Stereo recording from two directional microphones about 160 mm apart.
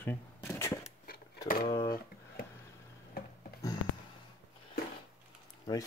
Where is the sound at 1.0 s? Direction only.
65° left (ahead or behind).